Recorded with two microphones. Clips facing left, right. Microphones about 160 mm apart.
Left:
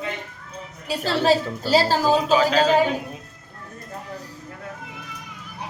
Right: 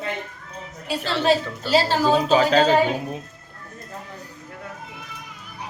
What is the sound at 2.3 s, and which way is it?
Speech, 40° right (ahead or behind).